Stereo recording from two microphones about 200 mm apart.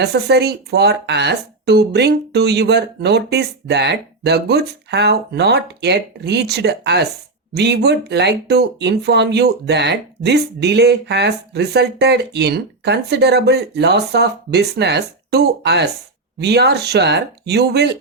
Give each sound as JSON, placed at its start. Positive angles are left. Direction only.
{"t": 0.0, "sound": "speech", "side_deg": -55}